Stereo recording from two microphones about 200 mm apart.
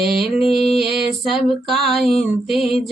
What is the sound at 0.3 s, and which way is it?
Mantra, 30° left (ahead or behind).